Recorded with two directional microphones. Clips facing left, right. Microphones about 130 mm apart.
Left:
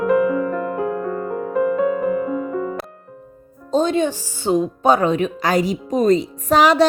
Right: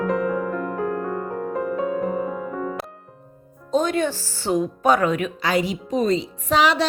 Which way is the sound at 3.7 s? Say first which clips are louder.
Left 3 dB; 25° left (ahead or behind).